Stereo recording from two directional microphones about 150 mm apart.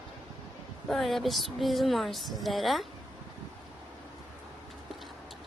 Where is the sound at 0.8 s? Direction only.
Centre (ahead or behind).